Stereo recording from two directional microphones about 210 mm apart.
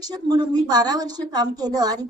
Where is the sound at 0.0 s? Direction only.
20° right (ahead or behind).